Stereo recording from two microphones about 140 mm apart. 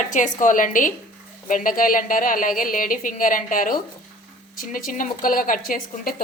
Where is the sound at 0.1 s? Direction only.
65° left (ahead or behind).